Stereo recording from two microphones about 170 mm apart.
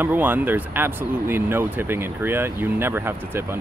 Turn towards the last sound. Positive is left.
turn(degrees=-15)  # may be behind; listen again after turning